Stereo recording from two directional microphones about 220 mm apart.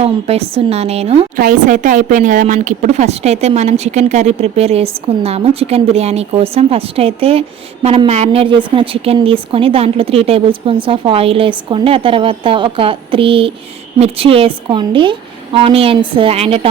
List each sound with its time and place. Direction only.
0.0 s a woman's voice: 25° right (ahead or behind)